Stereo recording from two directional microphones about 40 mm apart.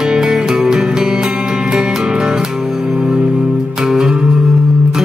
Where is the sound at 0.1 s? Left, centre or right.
Centre.